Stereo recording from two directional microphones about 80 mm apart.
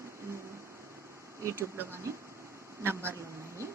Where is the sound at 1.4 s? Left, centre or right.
Right.